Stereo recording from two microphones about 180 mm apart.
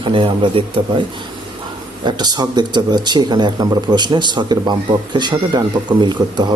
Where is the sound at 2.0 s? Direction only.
25° right (ahead or behind).